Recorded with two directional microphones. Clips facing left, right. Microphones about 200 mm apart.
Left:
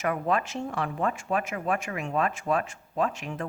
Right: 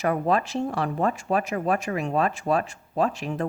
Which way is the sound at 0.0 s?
35° right (ahead or behind).